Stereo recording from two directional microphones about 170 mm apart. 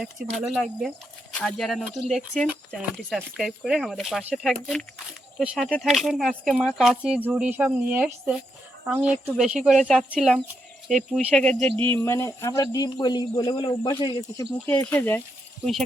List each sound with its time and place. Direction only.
0.4 s speech: centre (ahead or behind)
11.9 s speech: 15° left (ahead or behind)
14.7 s speech: 10° left (ahead or behind)